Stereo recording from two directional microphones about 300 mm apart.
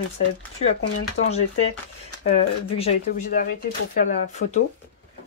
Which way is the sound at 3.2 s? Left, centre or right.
Left.